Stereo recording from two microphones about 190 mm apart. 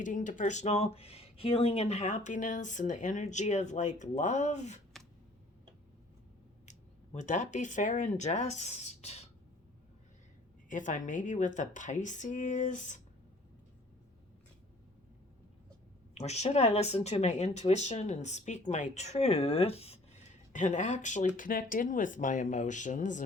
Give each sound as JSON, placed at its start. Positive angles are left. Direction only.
{"t": 0.0, "sound": "speech", "side_deg": 40}
{"t": 6.7, "sound": "speech", "side_deg": 40}
{"t": 10.7, "sound": "speech", "side_deg": 40}
{"t": 16.1, "sound": "speech", "side_deg": 35}